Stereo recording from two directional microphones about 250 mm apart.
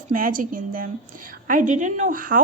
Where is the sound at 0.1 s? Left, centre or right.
Right.